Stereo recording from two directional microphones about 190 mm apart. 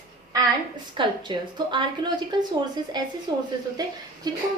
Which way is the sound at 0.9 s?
25° right (ahead or behind).